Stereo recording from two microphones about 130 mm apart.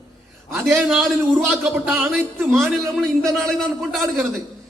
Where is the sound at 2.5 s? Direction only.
Centre (ahead or behind).